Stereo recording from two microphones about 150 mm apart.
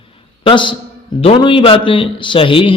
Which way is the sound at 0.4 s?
30° left (ahead or behind).